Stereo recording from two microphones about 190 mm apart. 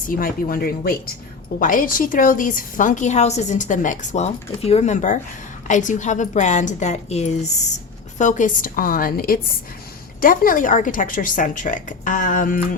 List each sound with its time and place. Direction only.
0.1 s a woman's voice: 50° left (ahead or behind)